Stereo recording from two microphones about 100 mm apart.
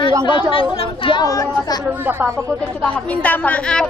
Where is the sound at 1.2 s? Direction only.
35° left (ahead or behind).